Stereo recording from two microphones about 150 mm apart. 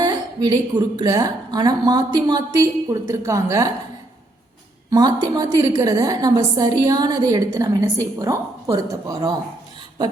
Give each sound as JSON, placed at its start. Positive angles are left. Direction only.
{"t": 0.0, "sound": "a woman's voice", "side_deg": -25}
{"t": 4.9, "sound": "a woman's voice", "side_deg": -25}